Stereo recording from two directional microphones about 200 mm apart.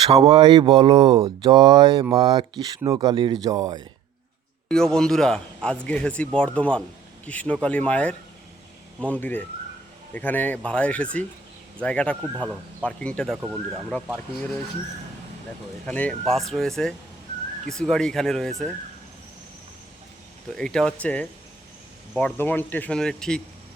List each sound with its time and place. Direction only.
0.1 s speech: 30° right (ahead or behind)
4.7 s speech: 5° left (ahead or behind)
15.9 s speech: 5° left (ahead or behind)
20.5 s speech: 5° left (ahead or behind)